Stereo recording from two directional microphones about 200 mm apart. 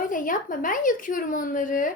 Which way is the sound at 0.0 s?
40° left (ahead or behind).